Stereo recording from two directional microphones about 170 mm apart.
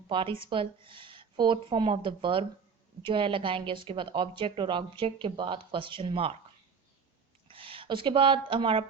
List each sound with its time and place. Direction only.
0.1 s a woman's voice: 30° right (ahead or behind)
7.4 s speech: 30° right (ahead or behind)